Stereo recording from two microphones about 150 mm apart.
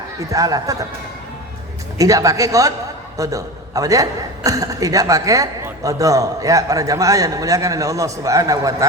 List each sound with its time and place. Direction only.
0.2 s a man's voice: 20° right (ahead or behind)
2.0 s a man's voice: 20° right (ahead or behind)